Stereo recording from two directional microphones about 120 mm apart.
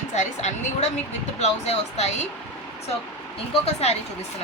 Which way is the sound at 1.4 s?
60° left (ahead or behind).